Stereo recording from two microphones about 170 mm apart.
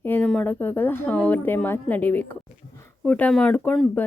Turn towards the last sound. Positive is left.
turn(degrees=10)  # may be behind; listen again after turning